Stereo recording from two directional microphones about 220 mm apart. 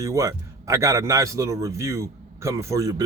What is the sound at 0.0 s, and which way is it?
A man's voice, 15° right (ahead or behind).